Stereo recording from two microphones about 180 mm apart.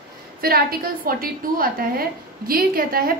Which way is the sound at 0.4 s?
55° right (ahead or behind).